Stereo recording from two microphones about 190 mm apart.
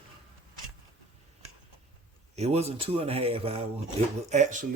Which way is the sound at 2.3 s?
35° right (ahead or behind).